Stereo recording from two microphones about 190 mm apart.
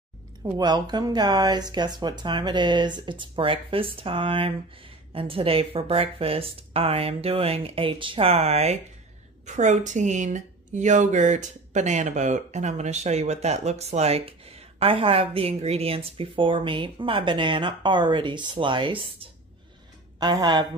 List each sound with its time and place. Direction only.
0.4 s speech: 20° right (ahead or behind)
20.2 s speech: 20° right (ahead or behind)